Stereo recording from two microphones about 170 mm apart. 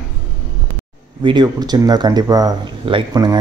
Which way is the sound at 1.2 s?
25° right (ahead or behind).